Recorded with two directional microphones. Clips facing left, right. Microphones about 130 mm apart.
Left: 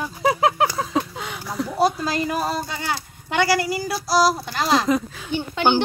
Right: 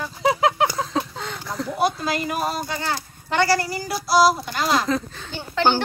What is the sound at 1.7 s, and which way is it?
Speech, 30° left (ahead or behind).